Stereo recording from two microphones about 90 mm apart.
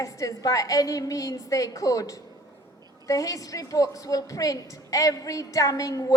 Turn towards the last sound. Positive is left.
turn(degrees=40)  # may be behind; listen again after turning